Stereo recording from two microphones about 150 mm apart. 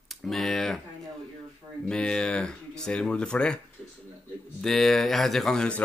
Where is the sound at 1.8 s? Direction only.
5° left (ahead or behind).